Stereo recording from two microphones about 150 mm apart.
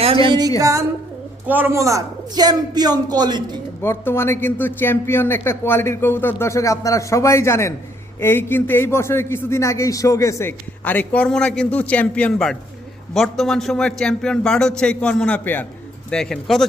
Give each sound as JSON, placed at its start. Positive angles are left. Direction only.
{"t": 0.3, "sound": "a man's voice", "side_deg": -25}
{"t": 3.8, "sound": "a man's voice", "side_deg": 15}